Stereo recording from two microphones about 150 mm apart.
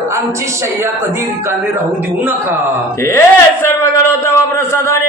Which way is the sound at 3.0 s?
15° left (ahead or behind).